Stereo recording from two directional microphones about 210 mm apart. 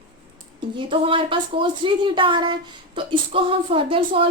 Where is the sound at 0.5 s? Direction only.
25° right (ahead or behind).